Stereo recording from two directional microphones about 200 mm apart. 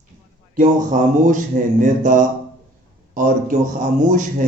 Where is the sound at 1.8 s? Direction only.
40° right (ahead or behind).